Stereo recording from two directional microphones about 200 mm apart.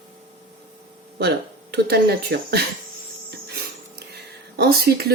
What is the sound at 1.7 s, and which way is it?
Speech, 55° right (ahead or behind).